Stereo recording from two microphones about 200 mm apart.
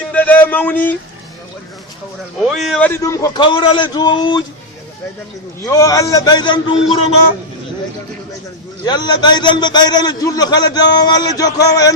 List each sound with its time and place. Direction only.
0.1 s a sound: 10° left (ahead or behind)
2.4 s a man's voice: centre (ahead or behind); by 4.4 s 20° left (ahead or behind)
5.6 s a man's voice: 15° left (ahead or behind)
8.8 s a man's voice: 20° left (ahead or behind)